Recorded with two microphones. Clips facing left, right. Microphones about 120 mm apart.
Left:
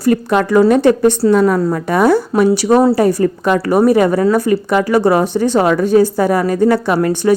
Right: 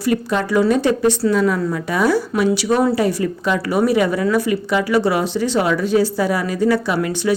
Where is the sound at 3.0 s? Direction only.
45° left (ahead or behind).